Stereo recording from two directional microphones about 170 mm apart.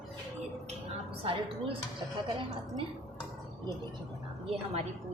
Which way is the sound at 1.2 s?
30° right (ahead or behind).